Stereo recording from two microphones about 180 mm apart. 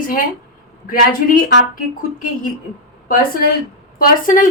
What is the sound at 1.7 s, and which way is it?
Speech, 50° left (ahead or behind).